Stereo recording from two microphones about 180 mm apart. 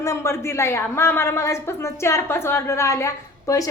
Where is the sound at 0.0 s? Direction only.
15° left (ahead or behind).